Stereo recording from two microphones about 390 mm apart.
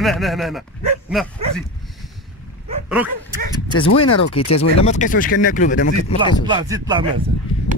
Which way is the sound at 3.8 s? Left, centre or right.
Left.